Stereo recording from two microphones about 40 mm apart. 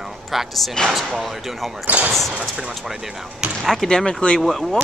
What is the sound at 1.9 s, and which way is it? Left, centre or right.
Speech, right.